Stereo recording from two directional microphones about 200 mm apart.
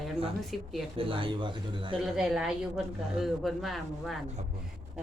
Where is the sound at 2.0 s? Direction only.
5° right (ahead or behind).